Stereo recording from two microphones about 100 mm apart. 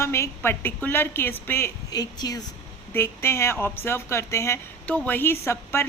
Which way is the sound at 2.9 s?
25° left (ahead or behind).